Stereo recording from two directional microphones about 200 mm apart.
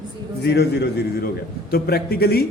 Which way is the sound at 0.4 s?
55° left (ahead or behind).